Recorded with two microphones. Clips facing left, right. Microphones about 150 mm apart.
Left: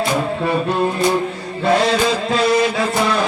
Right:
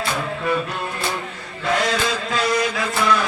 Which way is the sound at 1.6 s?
30° left (ahead or behind).